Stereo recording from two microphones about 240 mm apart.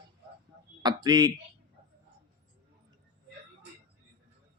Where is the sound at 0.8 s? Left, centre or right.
Centre.